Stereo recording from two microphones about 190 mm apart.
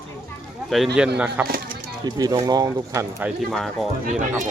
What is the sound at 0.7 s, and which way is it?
Speech, centre (ahead or behind).